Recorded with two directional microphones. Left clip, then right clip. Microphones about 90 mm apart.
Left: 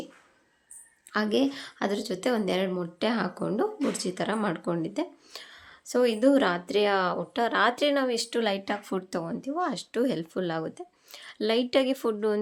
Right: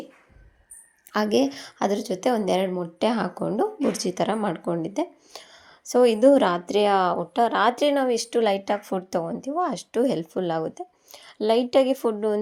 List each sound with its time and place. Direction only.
1.1 s speech: 40° right (ahead or behind)
2.6 s speech: 15° right (ahead or behind)
3.0 s a woman's voice: 35° right (ahead or behind)
4.4 s speech: 20° right (ahead or behind)
7.2 s speech: 25° right (ahead or behind)